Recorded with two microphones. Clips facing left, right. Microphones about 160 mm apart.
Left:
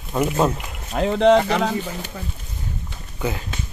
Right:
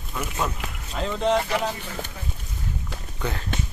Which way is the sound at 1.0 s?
70° left (ahead or behind).